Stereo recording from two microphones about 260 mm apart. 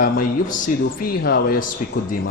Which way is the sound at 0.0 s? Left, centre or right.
Left.